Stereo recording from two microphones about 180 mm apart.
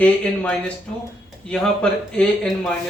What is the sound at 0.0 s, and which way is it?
A man's voice, 5° left (ahead or behind).